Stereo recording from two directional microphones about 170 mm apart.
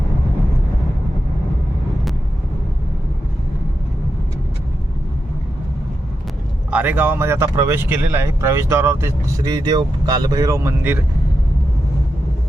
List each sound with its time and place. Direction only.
6.7 s speech: 10° right (ahead or behind)